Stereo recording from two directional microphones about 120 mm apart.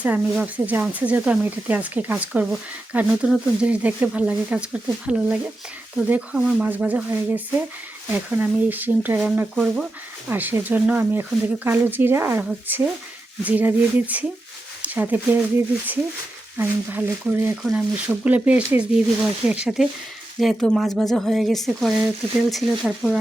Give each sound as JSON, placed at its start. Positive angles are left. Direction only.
{"t": 0.0, "sound": "speech", "side_deg": -15}